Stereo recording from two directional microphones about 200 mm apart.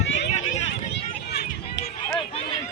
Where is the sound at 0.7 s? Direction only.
55° left (ahead or behind).